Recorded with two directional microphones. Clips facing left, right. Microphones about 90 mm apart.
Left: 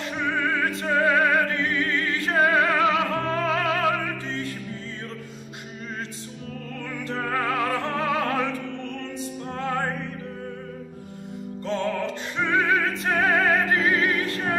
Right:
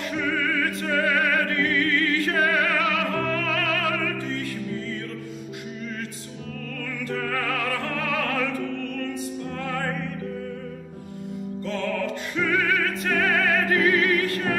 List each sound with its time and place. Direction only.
0.2 s opera: 25° left (ahead or behind)
6.8 s music: 25° left (ahead or behind)
9.6 s music: 25° left (ahead or behind)
11.6 s music: 25° left (ahead or behind)